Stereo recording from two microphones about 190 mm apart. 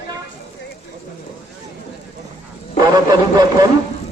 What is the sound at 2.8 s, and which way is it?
Speech, 20° right (ahead or behind).